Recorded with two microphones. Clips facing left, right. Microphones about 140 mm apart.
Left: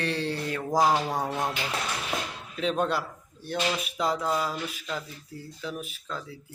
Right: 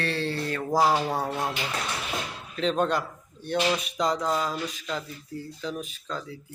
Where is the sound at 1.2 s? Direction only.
15° left (ahead or behind).